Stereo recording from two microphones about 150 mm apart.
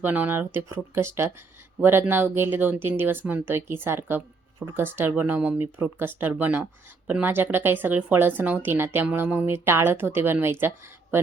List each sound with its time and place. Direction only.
0.0 s speech: 10° right (ahead or behind)